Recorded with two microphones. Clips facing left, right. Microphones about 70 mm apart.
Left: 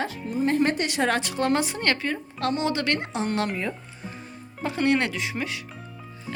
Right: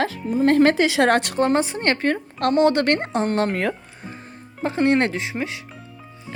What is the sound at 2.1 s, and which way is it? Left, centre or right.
A woman's voice, right.